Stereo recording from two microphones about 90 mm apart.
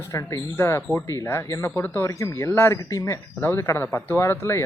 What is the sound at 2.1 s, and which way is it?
Speech, 35° left (ahead or behind).